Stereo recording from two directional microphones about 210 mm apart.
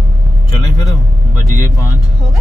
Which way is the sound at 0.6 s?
20° left (ahead or behind).